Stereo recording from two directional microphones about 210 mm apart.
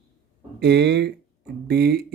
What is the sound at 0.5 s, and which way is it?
Speech, 55° right (ahead or behind).